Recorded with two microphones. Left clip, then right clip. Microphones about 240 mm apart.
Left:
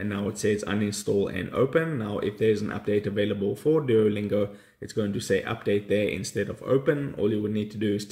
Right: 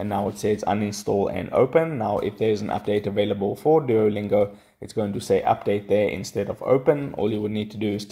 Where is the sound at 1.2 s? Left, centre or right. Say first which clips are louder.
Right 5 dB; right.